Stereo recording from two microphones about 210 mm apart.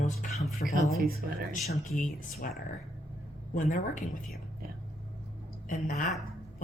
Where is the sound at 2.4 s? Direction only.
40° left (ahead or behind).